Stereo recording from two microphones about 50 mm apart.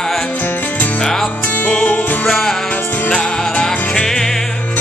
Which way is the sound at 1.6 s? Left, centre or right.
Left.